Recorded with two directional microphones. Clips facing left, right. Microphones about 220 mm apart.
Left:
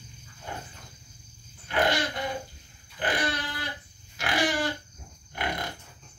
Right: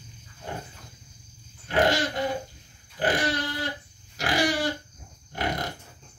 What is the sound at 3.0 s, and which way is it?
Dog, 45° right (ahead or behind).